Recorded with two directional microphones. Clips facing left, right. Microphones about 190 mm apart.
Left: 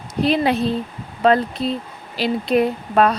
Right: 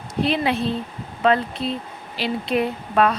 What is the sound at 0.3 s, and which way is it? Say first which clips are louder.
Speech: left 4 dB; 40° left (ahead or behind).